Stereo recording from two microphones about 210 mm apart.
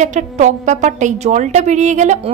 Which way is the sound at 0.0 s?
35° right (ahead or behind).